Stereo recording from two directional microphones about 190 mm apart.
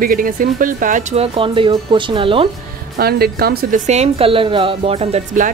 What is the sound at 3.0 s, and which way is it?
Speech, 55° right (ahead or behind).